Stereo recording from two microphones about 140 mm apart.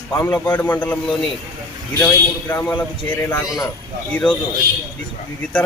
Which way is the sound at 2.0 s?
10° left (ahead or behind).